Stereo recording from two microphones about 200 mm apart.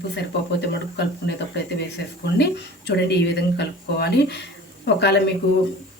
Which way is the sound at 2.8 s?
55° left (ahead or behind).